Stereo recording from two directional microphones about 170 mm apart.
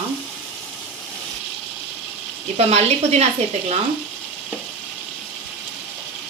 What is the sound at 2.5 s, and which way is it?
Speech, 40° right (ahead or behind).